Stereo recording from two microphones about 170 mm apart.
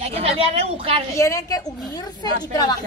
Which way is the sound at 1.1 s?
20° left (ahead or behind).